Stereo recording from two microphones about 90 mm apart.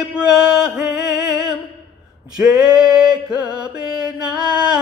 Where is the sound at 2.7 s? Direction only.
5° right (ahead or behind).